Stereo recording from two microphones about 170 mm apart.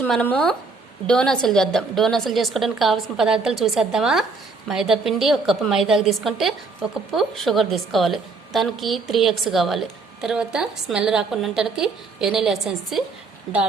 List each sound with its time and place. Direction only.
0.0 s a woman's voice: 10° left (ahead or behind)